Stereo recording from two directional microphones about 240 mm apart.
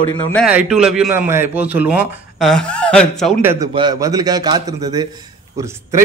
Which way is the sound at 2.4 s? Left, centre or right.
Centre.